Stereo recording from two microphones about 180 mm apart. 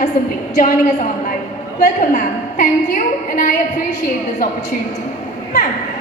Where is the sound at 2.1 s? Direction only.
50° left (ahead or behind).